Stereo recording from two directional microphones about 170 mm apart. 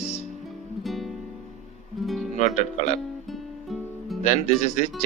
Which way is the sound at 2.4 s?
40° left (ahead or behind).